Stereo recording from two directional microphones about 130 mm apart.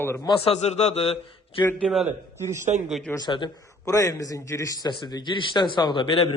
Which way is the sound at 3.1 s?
30° left (ahead or behind).